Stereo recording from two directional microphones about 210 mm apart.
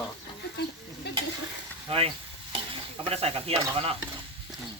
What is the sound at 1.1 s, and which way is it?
Stir, 50° left (ahead or behind).